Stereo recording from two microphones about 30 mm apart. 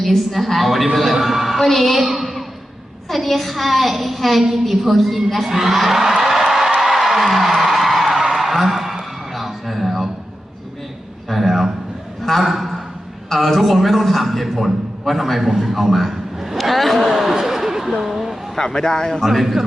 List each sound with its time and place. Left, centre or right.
0.0 s a woman's voice: centre
1.6 s a man's voice: centre
2.0 s a sound: centre
3.1 s a man's voice: centre
5.7 s music: centre
11.3 s a sound: centre
13.3 s a man's voice: centre
15.7 s a sound: centre
16.6 s a man's voice: centre
17.1 s a sound: centre
18.5 s speech: centre
19.2 s a man's voice: centre